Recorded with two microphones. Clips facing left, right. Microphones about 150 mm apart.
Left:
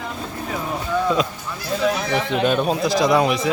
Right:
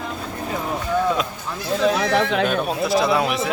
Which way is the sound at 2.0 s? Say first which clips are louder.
Right 3 dB; 90° right.